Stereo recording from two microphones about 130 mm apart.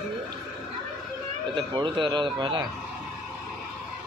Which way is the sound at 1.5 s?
40° right (ahead or behind).